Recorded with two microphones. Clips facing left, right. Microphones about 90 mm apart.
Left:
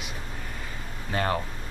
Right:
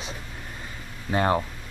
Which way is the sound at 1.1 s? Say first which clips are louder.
Right 4 dB; 20° right (ahead or behind).